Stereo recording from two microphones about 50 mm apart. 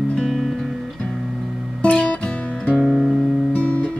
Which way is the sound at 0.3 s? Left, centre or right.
Centre.